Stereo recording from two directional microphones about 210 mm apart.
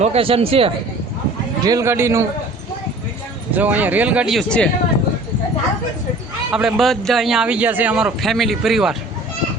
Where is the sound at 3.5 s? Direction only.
5° right (ahead or behind).